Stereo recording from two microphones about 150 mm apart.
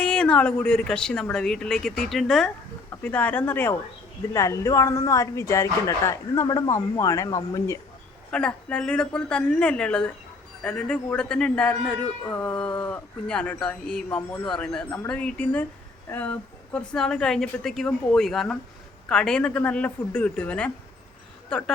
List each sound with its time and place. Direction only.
0.0 s a woman's voice: 5° left (ahead or behind)
8.3 s a woman's voice: 5° left (ahead or behind)